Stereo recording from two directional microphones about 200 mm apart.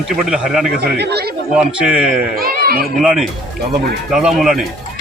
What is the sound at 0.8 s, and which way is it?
Speech, 55° right (ahead or behind).